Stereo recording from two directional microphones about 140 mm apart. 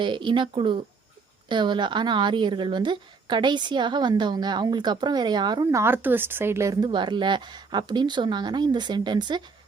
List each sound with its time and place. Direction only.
0.0 s a woman's voice: 35° right (ahead or behind)
5.8 s a woman's voice: 15° right (ahead or behind); by 9.4 s 30° right (ahead or behind)